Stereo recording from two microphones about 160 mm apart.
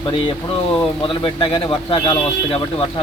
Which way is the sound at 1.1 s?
35° left (ahead or behind).